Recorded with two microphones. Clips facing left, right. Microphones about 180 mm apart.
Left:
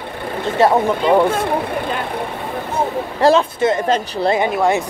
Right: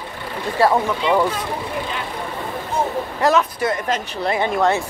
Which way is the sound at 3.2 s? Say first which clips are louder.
Left 5 dB; 30° left (ahead or behind).